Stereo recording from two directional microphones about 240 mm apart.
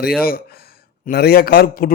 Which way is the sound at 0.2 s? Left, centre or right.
Left.